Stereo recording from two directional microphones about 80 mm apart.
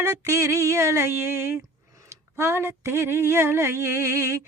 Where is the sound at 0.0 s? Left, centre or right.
Right.